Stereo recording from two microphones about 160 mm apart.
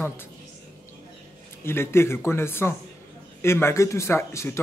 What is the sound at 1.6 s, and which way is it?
Speech, 15° left (ahead or behind).